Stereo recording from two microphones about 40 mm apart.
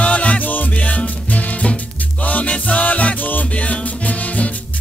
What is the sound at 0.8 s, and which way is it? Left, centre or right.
Music, left.